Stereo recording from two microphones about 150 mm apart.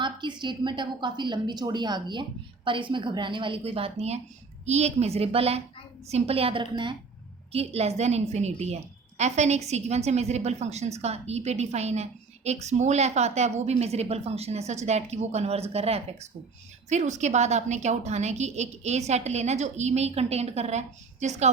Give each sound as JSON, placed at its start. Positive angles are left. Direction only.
{"t": 0.0, "sound": "a woman's voice", "side_deg": -30}
{"t": 7.5, "sound": "a woman's voice", "side_deg": -45}